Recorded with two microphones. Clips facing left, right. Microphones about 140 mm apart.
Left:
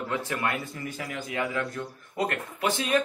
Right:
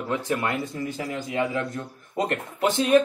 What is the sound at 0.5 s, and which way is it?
Speech, 20° right (ahead or behind).